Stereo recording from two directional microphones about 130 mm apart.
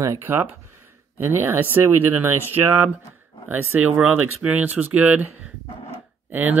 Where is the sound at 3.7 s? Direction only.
10° right (ahead or behind).